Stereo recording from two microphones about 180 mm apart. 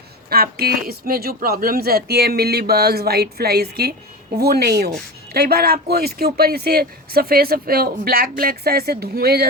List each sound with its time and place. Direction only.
0.3 s speech: 55° right (ahead or behind)